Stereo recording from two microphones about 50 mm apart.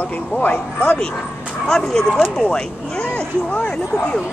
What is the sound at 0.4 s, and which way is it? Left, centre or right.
Speech, left.